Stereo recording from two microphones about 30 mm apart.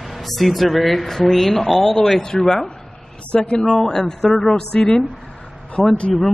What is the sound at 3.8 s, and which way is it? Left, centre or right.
Speech, centre.